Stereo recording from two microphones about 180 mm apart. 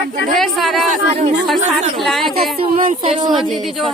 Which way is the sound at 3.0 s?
30° right (ahead or behind).